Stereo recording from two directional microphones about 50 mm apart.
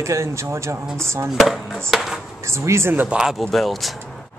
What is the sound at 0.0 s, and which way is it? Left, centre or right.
Speech, right.